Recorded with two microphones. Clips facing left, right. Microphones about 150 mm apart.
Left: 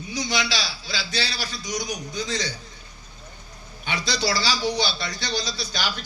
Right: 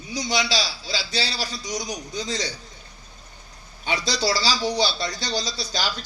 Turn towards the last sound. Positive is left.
turn(degrees=-35)  # may be behind; listen again after turning